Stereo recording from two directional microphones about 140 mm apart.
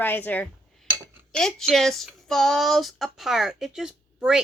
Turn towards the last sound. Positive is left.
turn(degrees=-5)  # may be behind; listen again after turning